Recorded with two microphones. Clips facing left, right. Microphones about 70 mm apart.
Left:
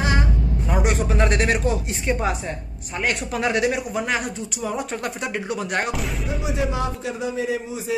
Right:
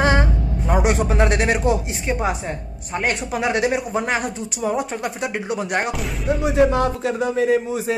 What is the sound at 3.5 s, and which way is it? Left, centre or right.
Speech, right.